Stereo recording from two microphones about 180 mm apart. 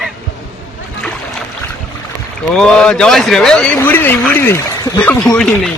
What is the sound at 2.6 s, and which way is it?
Speech, 5° left (ahead or behind).